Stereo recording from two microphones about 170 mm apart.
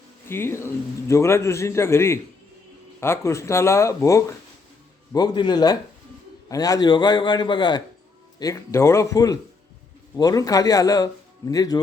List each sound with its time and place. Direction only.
0.3 s a man's voice: 15° left (ahead or behind)